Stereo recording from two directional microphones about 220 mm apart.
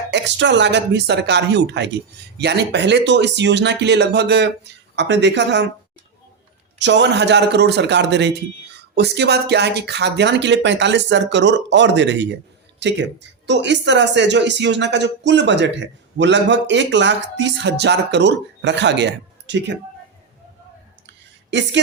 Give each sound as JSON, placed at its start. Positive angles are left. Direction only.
{"t": 0.1, "sound": "speech", "side_deg": -55}
{"t": 6.7, "sound": "speech", "side_deg": -55}